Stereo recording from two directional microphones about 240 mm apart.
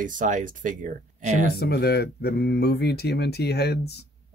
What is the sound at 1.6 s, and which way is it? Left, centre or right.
Speech, left.